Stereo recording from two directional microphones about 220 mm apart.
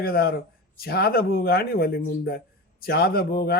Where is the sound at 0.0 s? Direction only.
45° left (ahead or behind).